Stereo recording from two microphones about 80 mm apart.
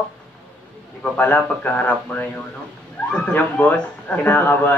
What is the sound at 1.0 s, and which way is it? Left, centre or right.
A man's voice, left.